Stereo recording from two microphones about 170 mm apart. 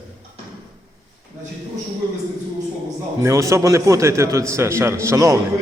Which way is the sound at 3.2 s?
15° right (ahead or behind).